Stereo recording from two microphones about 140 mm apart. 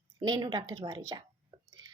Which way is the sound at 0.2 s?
35° right (ahead or behind).